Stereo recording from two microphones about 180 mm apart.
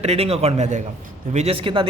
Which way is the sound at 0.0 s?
35° right (ahead or behind).